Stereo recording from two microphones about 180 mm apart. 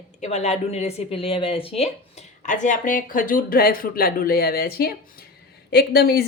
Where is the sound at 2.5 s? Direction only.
45° left (ahead or behind).